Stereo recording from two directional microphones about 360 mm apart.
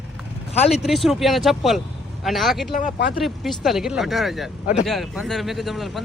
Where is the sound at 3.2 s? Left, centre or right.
Centre.